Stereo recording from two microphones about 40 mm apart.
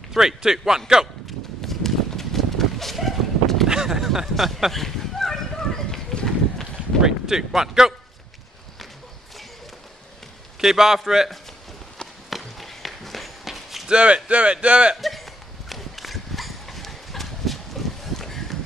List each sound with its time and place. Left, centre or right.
0.1 s a man's voice: centre
1.7 s horse: centre
3.6 s a sound: centre
6.2 s run: centre
7.0 s speech: centre
10.6 s a man's voice: centre
12.3 s run: centre
13.8 s speech: right
15.0 s a sound: centre